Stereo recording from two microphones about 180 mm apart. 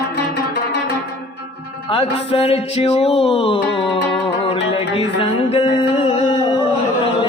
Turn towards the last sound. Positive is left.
turn(degrees=30)  # may be behind; listen again after turning